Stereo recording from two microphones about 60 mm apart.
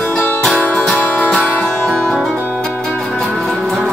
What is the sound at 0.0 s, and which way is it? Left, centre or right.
Music, left.